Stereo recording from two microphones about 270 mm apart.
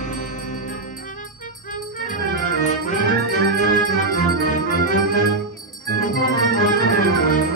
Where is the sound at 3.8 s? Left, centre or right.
Left.